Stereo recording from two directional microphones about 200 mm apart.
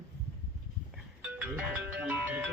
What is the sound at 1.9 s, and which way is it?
Music, 10° right (ahead or behind).